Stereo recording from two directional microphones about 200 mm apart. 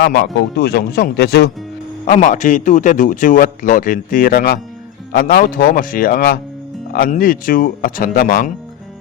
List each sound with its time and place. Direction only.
0.0 s speech: 55° left (ahead or behind)
2.0 s speech: 40° left (ahead or behind)